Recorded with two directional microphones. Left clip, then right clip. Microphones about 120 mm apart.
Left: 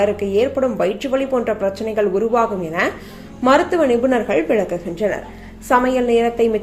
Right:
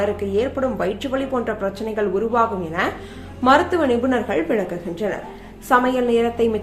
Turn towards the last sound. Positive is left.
turn(degrees=15)  # may be behind; listen again after turning